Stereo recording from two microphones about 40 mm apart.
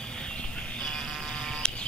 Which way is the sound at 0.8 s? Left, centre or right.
Centre.